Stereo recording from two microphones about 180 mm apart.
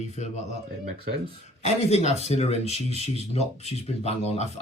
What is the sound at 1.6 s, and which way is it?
Speech, 35° left (ahead or behind).